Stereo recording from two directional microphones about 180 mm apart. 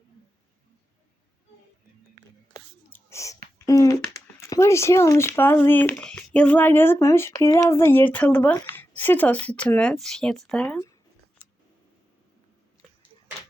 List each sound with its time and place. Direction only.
2.9 s whispering: 15° left (ahead or behind)
3.7 s speech: 20° left (ahead or behind)